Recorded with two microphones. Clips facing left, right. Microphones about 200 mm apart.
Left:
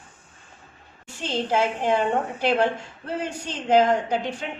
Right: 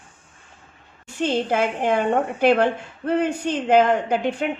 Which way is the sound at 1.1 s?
60° right (ahead or behind).